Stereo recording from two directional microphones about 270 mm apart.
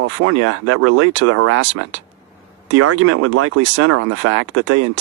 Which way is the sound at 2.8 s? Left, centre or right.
Right.